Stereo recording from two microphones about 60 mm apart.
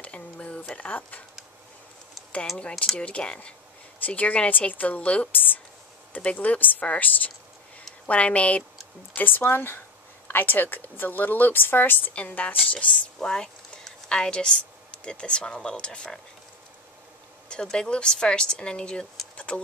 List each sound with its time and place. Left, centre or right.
0.0 s a sound: left
0.7 s a woman's voice: left
3.0 s a woman's voice: centre
9.1 s a woman's voice: left
12.7 s a woman's voice: centre
17.5 s a woman's voice: centre
19.3 s a sound: left